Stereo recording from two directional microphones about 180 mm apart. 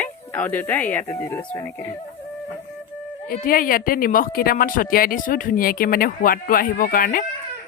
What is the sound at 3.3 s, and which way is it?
Speech, 55° left (ahead or behind).